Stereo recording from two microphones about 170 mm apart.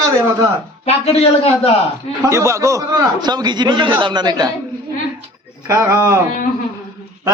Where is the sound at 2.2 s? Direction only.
15° right (ahead or behind).